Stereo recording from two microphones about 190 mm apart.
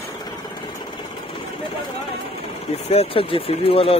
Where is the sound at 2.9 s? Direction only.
30° left (ahead or behind).